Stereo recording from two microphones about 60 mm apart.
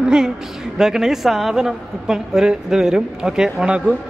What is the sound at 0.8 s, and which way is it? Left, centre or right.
A woman's voice, centre.